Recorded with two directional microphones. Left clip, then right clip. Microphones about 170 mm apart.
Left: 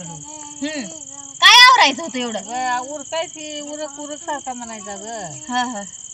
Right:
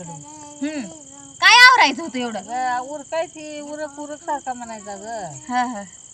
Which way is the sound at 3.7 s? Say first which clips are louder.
Left 1 dB; 15° right (ahead or behind).